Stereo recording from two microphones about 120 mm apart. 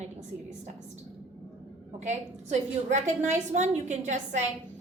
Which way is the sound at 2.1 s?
75° right (ahead or behind).